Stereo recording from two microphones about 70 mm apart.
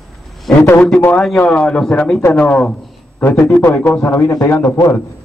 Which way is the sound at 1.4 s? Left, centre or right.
Centre.